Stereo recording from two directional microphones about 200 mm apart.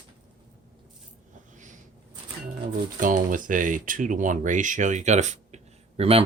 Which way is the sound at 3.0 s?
40° right (ahead or behind).